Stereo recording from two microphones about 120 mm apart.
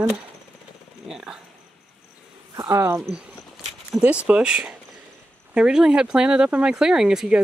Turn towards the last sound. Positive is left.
turn(degrees=-5)  # may be behind; listen again after turning